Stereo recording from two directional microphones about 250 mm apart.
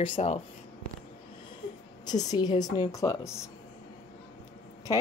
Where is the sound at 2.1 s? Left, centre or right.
Centre.